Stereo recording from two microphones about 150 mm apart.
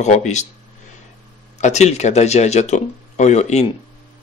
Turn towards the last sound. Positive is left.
turn(degrees=45)  # may be behind; listen again after turning